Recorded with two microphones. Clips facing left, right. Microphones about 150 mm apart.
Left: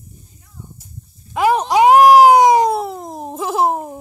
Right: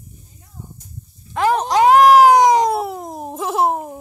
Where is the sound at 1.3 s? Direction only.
10° left (ahead or behind).